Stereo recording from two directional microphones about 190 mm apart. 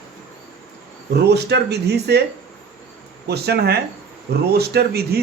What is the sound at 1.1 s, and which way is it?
Speech, 60° right (ahead or behind).